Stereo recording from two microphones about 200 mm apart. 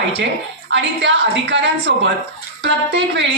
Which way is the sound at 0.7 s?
60° right (ahead or behind).